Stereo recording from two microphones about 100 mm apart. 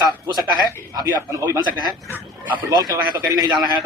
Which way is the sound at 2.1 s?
15° right (ahead or behind).